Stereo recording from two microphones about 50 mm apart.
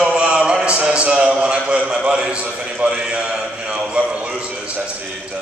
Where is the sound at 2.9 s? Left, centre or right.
Centre.